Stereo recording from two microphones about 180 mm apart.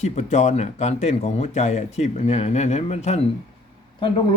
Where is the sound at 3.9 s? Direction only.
25° left (ahead or behind).